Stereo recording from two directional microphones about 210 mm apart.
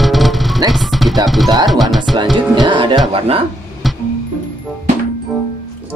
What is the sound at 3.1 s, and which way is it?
Speech, 25° right (ahead or behind).